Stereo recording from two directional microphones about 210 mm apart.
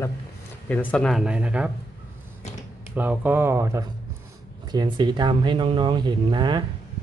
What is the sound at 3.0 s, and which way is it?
Speech, 10° right (ahead or behind).